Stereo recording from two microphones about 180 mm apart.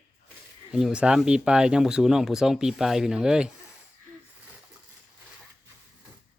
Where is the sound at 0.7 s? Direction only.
5° right (ahead or behind).